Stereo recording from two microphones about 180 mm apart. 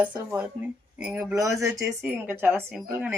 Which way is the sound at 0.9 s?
5° right (ahead or behind).